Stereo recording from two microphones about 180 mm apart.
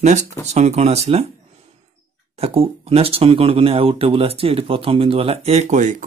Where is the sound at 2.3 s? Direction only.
35° right (ahead or behind).